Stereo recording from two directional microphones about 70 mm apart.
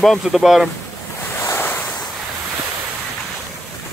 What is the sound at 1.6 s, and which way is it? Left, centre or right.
Waves, left.